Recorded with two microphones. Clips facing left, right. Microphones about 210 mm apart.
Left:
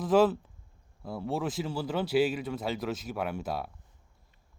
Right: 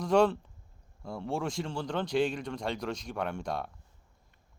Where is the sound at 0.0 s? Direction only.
5° left (ahead or behind).